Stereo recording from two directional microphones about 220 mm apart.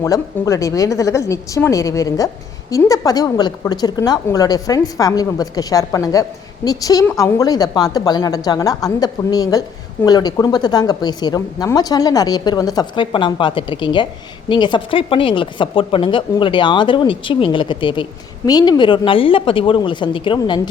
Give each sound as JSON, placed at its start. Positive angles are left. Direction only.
{"t": 0.0, "sound": "a woman's voice", "side_deg": 15}